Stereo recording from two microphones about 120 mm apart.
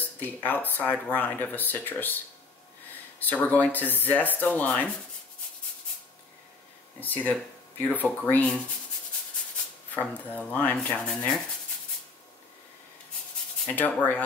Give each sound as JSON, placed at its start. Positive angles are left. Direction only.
{"t": 0.0, "sound": "speech", "side_deg": 15}
{"t": 7.0, "sound": "speech", "side_deg": 15}
{"t": 9.9, "sound": "speech", "side_deg": 15}
{"t": 13.7, "sound": "speech", "side_deg": 10}